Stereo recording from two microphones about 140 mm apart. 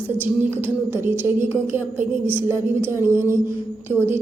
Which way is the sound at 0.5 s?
15° right (ahead or behind).